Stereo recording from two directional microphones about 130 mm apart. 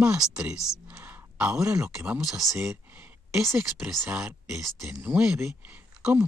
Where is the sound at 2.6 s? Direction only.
20° right (ahead or behind).